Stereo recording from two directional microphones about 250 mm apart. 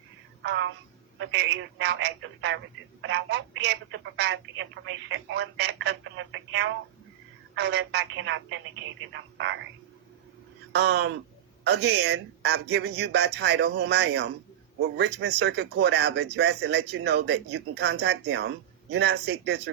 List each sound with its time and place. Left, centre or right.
0.4 s a sound: right
1.3 s speech: right
10.7 s speech: right